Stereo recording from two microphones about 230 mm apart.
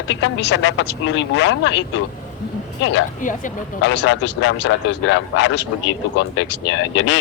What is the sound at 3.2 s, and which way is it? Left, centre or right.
Speech, left.